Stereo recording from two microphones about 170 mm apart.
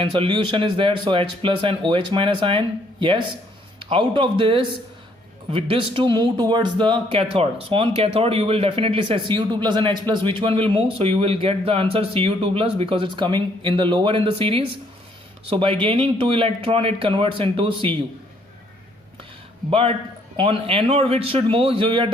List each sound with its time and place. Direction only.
0.0 s speech: 30° right (ahead or behind)
19.7 s speech: 35° right (ahead or behind)